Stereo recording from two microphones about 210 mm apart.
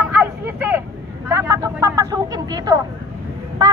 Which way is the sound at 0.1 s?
10° right (ahead or behind).